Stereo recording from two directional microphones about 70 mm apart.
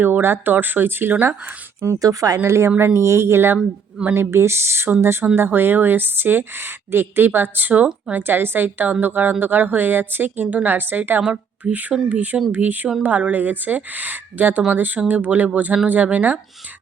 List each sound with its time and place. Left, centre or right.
0.0 s speech: right
2.0 s speech: right
2.4 s speech: right
11.2 s a woman's voice: centre
11.7 s speech: right